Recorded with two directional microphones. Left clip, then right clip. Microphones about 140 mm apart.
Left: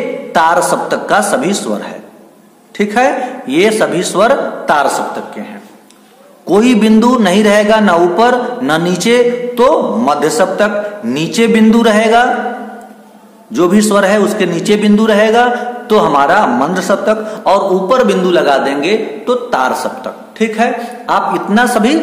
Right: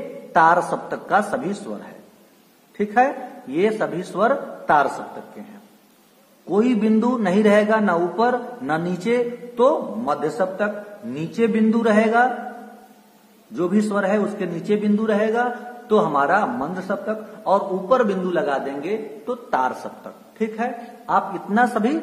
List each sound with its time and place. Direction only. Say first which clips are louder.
0.3 s a man's voice: left 6 dB; 10° right (ahead or behind)
2.8 s a man's voice: left 8 dB; 5° right (ahead or behind)
6.5 s a man's voice: left 10 dB; 5° left (ahead or behind)
13.5 s a man's voice: left 12 dB; 5° left (ahead or behind)
18.8 s a man's voice: left 13 dB; 15° right (ahead or behind)